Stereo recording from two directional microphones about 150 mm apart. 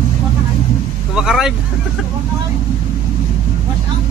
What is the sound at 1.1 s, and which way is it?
Vehicle, centre (ahead or behind).